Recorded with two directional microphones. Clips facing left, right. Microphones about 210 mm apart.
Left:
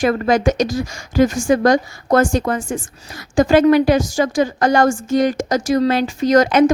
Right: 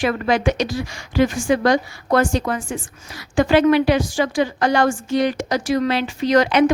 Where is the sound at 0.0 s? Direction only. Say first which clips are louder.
Left 3 dB; 45° left (ahead or behind).